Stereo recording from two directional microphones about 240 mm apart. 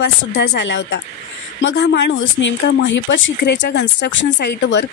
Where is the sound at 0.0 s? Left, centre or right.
Left.